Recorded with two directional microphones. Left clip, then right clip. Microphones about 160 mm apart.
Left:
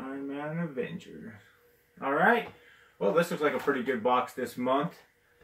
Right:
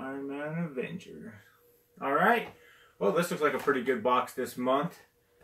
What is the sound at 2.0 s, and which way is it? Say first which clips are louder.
Speech: left 1 dB; 15° right (ahead or behind).